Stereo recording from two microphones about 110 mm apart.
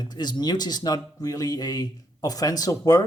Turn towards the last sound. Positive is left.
turn(degrees=35)  # may be behind; listen again after turning